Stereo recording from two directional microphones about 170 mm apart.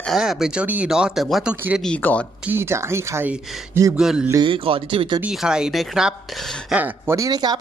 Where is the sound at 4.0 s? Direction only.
5° right (ahead or behind).